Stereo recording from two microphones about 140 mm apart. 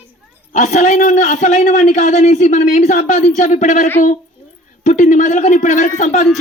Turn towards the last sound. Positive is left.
turn(degrees=60)  # may be behind; listen again after turning